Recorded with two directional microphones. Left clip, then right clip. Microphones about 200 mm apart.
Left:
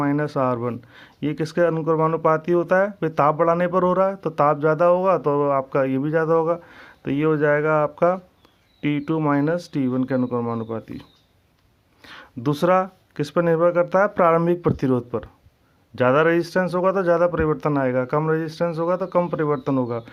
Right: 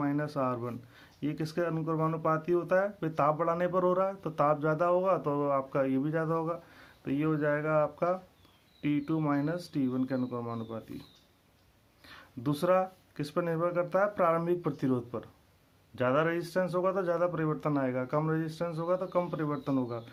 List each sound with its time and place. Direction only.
0.0 s speech: 45° left (ahead or behind)
12.0 s speech: 45° left (ahead or behind)